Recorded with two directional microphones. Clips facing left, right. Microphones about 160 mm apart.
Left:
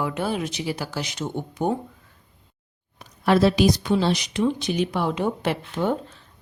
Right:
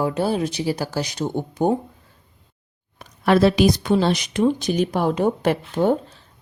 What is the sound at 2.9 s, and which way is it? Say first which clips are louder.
Speech: right 2 dB; 60° right (ahead or behind).